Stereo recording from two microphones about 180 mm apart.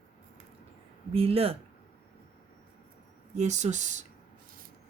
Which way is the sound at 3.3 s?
40° right (ahead or behind).